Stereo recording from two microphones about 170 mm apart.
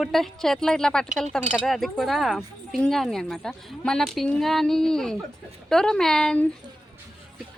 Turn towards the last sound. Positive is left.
turn(degrees=5)  # may be behind; listen again after turning